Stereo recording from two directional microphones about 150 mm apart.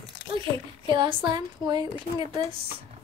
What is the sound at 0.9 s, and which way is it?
A woman's voice, 30° right (ahead or behind).